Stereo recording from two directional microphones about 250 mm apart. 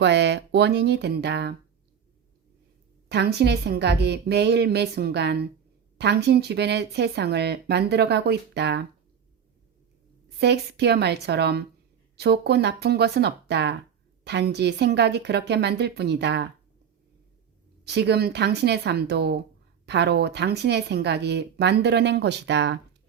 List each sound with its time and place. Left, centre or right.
0.0 s speech: right
3.1 s speech: right
10.2 s speech: right
17.8 s speech: right